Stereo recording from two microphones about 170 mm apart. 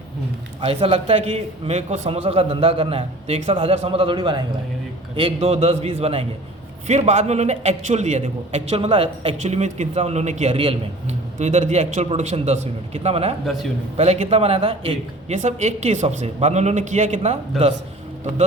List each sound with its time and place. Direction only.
0.6 s a man's voice: 35° right (ahead or behind)
15.4 s a man's voice: 45° right (ahead or behind)
17.5 s a man's voice: centre (ahead or behind)